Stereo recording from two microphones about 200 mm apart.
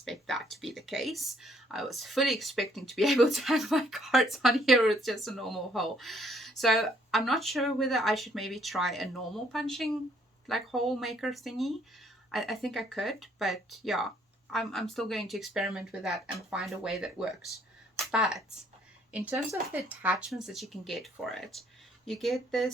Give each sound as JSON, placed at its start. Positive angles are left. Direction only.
{"t": 0.0, "sound": "speech", "side_deg": 0}